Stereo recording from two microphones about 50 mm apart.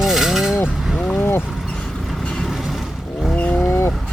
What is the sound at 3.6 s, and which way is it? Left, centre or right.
Vehicle, left.